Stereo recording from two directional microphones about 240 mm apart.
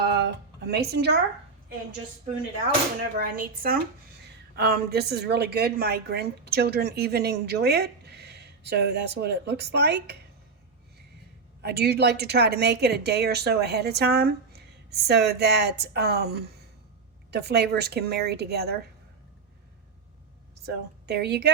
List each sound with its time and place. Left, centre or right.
0.0 s music: right
3.2 s a woman's voice: right
11.6 s a woman's voice: right
21.1 s a woman's voice: right